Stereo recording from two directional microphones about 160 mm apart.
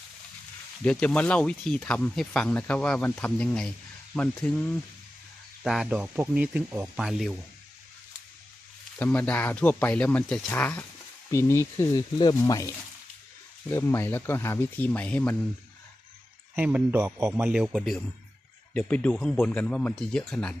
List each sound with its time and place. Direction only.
0.9 s speech: 5° left (ahead or behind); by 7.0 s 15° right (ahead or behind)
7.0 s speech: centre (ahead or behind)
9.0 s speech: 10° left (ahead or behind)
16.6 s speech: 5° right (ahead or behind)